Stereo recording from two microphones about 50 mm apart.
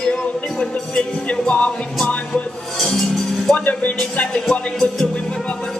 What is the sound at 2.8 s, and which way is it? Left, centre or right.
Music, centre.